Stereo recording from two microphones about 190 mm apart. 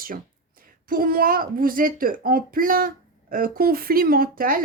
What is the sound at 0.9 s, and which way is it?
Speech, 50° right (ahead or behind).